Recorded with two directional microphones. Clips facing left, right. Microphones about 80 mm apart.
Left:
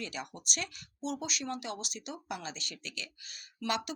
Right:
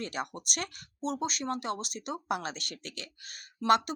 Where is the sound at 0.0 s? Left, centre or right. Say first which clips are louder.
Right 5 dB; right.